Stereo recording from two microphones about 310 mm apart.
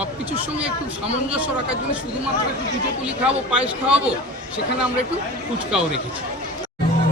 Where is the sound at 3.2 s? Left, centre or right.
Centre.